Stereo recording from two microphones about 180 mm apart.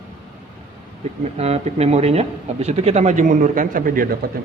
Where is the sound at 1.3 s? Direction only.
35° right (ahead or behind).